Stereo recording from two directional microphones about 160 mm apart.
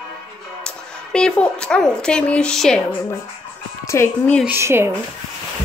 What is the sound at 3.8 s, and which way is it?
Speech, 15° left (ahead or behind).